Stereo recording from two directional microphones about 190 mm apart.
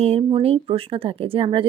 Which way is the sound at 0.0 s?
30° right (ahead or behind).